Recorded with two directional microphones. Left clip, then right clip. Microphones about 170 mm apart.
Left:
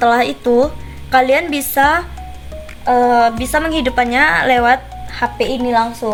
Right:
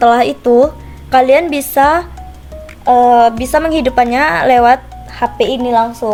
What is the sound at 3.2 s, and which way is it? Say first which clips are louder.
Speech: right 4 dB; 55° right (ahead or behind).